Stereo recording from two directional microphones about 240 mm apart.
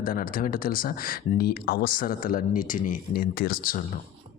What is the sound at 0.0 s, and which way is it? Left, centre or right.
Speech, left.